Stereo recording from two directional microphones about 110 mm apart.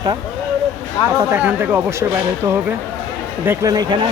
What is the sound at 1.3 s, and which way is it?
Speech, 15° right (ahead or behind).